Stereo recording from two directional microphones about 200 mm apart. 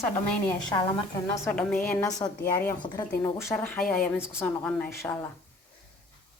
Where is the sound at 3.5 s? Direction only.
5° left (ahead or behind).